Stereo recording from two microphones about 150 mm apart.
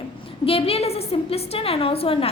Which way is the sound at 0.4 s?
40° left (ahead or behind).